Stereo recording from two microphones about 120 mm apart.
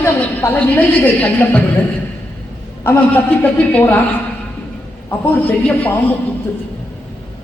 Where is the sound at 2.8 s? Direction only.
20° left (ahead or behind).